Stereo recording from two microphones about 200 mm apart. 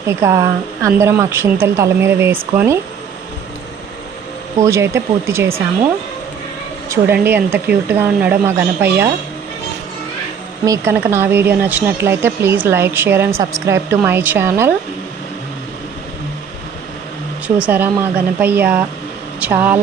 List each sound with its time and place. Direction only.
0.2 s speech: 15° right (ahead or behind)
4.6 s speech: 15° right (ahead or behind)
6.8 s speech: 15° right (ahead or behind)
10.7 s speech: 10° right (ahead or behind)
17.6 s speech: 10° right (ahead or behind)